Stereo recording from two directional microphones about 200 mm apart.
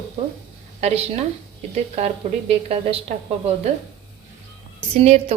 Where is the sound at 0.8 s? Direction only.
35° right (ahead or behind).